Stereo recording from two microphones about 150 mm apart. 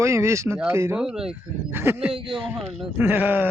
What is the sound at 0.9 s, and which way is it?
Speech, 5° right (ahead or behind).